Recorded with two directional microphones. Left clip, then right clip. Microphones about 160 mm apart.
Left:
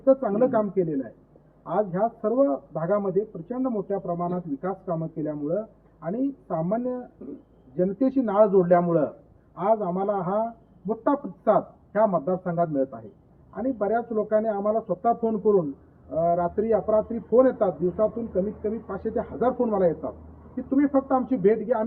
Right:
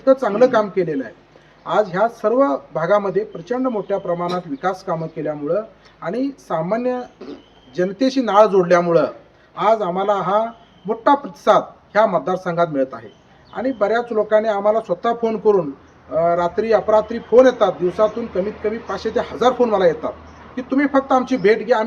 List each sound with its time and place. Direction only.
0.0 s speech: 5° right (ahead or behind)